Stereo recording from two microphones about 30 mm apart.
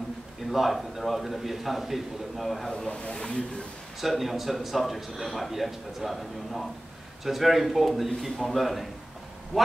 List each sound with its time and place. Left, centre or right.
0.5 s a man's voice: centre
2.9 s speech: left
4.0 s a man's voice: centre
7.2 s a man's voice: centre